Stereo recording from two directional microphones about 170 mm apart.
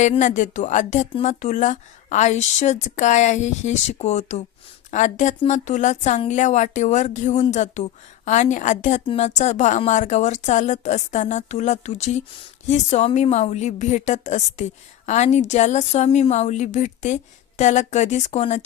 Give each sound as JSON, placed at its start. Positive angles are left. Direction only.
{"t": 0.0, "sound": "a woman's voice", "side_deg": 45}